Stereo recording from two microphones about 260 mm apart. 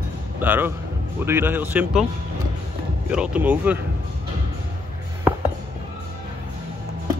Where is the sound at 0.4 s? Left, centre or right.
Centre.